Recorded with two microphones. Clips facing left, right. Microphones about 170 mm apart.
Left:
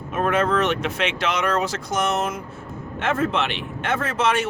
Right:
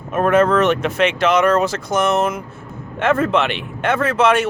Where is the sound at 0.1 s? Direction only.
50° right (ahead or behind).